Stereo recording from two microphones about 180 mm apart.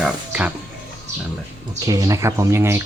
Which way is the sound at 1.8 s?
20° right (ahead or behind).